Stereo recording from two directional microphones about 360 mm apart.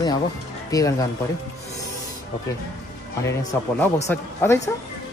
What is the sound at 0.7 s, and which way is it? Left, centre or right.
Speech, centre.